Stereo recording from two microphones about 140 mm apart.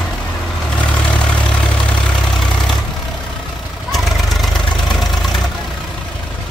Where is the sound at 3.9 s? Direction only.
Centre (ahead or behind).